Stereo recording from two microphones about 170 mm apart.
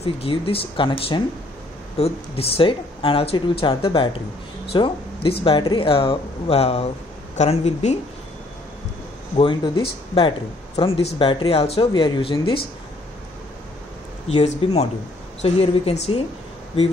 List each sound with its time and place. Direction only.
0.0 s speech: 35° left (ahead or behind)
9.4 s speech: 30° left (ahead or behind)
14.2 s speech: 40° left (ahead or behind)